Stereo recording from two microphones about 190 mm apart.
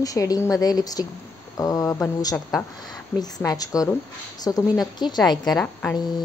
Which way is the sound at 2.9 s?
20° left (ahead or behind).